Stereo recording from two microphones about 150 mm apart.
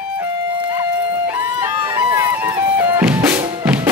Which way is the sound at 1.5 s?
20° right (ahead or behind).